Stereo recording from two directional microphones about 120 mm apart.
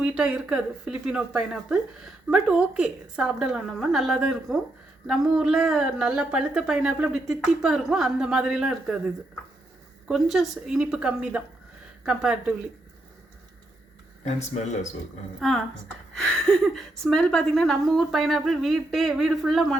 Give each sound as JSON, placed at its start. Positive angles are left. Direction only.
{"t": 0.0, "sound": "a woman's voice", "side_deg": -5}
{"t": 10.1, "sound": "speech", "side_deg": -5}
{"t": 14.3, "sound": "speech", "side_deg": 70}
{"t": 15.4, "sound": "a woman's voice", "side_deg": 5}